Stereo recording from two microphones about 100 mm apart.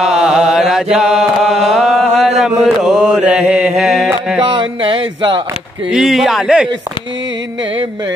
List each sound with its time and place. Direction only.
0.0 s chant: 5° right (ahead or behind)
0.9 s mantra: 5° right (ahead or behind)
4.4 s a sound: 60° right (ahead or behind)
5.9 s a man's voice: 5° right (ahead or behind)